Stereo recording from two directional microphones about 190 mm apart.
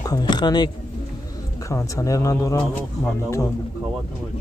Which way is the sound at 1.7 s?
15° left (ahead or behind).